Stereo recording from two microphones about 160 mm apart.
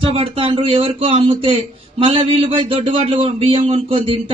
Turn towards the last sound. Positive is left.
turn(degrees=-35)  # may be behind; listen again after turning